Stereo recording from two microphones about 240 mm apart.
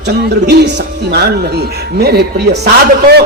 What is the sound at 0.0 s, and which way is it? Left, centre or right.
A man's voice, right.